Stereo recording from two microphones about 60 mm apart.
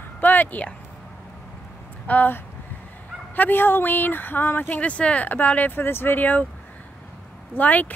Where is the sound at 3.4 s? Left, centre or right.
Left.